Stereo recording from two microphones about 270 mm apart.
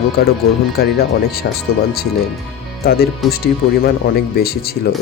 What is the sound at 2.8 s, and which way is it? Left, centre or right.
Speech, left.